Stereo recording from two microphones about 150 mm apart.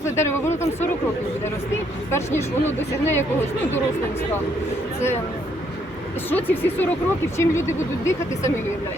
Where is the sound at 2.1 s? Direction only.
15° left (ahead or behind).